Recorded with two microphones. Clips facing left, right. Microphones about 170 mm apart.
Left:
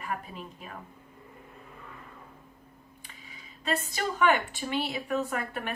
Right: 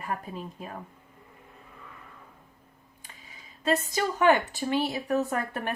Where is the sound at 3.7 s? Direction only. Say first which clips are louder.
Right 4 dB; 40° right (ahead or behind).